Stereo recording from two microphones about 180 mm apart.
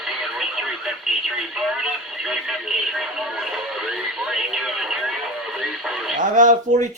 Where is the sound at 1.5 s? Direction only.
Centre (ahead or behind).